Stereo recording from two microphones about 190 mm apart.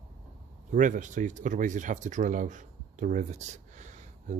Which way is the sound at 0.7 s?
45° right (ahead or behind).